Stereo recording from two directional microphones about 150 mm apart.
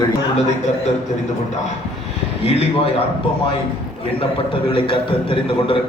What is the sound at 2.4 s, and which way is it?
Speech, 40° left (ahead or behind).